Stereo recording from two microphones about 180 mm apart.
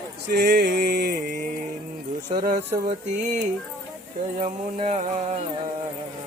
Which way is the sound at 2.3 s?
50° right (ahead or behind).